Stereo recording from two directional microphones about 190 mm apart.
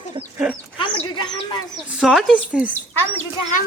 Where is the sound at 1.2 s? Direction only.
25° left (ahead or behind).